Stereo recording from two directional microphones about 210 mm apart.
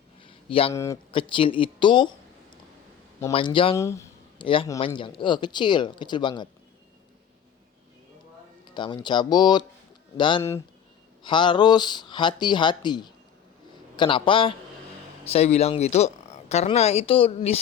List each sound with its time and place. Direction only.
0.2 s a sound: 25° left (ahead or behind)
0.7 s speech: 15° left (ahead or behind)
1.1 s speech: 25° left (ahead or behind)
3.3 s speech: 25° left (ahead or behind)
3.8 s speech: 15° left (ahead or behind)
8.6 s speech: 20° left (ahead or behind)